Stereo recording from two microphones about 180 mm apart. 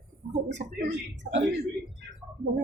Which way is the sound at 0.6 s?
40° right (ahead or behind).